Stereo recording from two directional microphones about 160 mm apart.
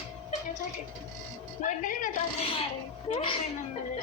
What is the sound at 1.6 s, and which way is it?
Speech, 55° left (ahead or behind).